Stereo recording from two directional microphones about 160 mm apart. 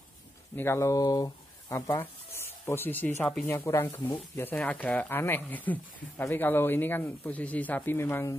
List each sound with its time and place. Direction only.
0.6 s speech: 15° left (ahead or behind)